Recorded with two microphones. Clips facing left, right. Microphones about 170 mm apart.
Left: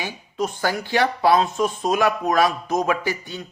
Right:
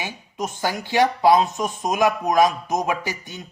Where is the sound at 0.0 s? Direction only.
20° right (ahead or behind).